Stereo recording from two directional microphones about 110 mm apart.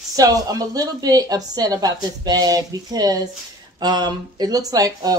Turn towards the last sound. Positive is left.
turn(degrees=-35)  # may be behind; listen again after turning